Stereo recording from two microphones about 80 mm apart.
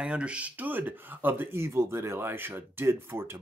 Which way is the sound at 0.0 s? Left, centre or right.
Centre.